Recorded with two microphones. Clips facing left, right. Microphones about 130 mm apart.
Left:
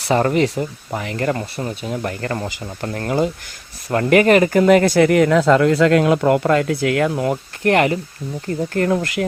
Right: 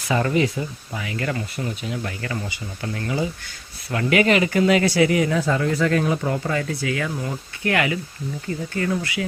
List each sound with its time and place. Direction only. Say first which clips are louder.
0.1 s speech: left 4 dB; 45° left (ahead or behind)
0.9 s speech: left 7 dB; 50° left (ahead or behind)